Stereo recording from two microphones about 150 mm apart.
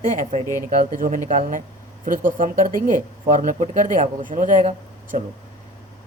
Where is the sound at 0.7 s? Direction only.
65° right (ahead or behind).